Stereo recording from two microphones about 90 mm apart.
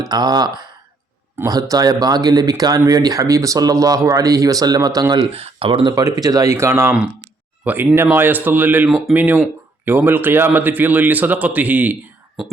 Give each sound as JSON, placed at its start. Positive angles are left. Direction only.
{"t": 0.0, "sound": "speech", "side_deg": -50}
{"t": 5.3, "sound": "speech", "side_deg": -90}
{"t": 5.9, "sound": "a man's voice", "side_deg": -40}